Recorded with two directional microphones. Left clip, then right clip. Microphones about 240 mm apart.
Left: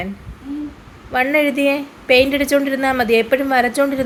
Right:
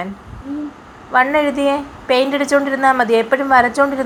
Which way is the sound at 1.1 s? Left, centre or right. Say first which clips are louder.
Right 2 dB; left.